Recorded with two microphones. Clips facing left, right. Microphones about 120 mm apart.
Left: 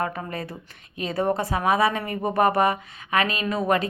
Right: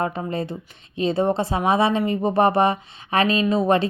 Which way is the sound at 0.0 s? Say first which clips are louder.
Right 4 dB; 25° right (ahead or behind).